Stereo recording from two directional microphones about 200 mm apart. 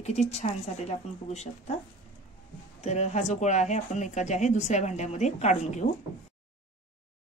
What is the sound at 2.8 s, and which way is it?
Speech, 35° left (ahead or behind).